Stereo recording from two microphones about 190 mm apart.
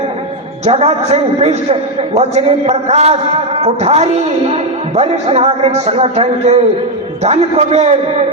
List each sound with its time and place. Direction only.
0.6 s speech: 35° right (ahead or behind)